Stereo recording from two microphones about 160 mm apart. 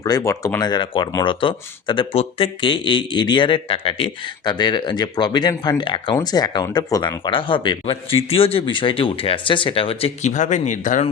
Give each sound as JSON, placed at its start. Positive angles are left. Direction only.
{"t": 0.0, "sound": "speech", "side_deg": 20}